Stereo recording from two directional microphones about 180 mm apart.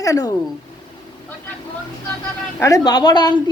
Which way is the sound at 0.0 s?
20° left (ahead or behind).